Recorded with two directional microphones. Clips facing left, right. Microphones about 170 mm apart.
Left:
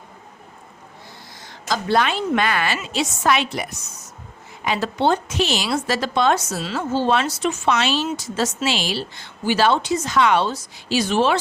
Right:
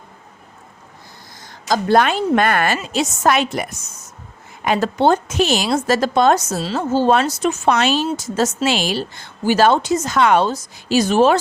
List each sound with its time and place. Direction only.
1.4 s a woman's voice: 45° right (ahead or behind)